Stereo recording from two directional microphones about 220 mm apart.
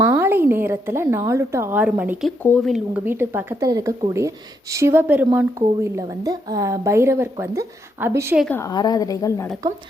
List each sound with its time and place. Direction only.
0.0 s a woman's voice: 10° right (ahead or behind)
2.4 s a woman's voice: 5° left (ahead or behind)
8.4 s a woman's voice: 10° left (ahead or behind)